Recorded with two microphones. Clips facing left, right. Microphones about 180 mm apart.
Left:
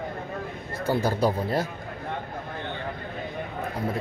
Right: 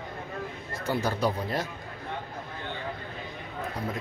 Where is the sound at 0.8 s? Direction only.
30° left (ahead or behind).